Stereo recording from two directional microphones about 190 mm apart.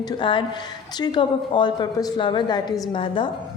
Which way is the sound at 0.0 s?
25° left (ahead or behind).